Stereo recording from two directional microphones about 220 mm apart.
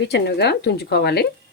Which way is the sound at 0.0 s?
50° left (ahead or behind).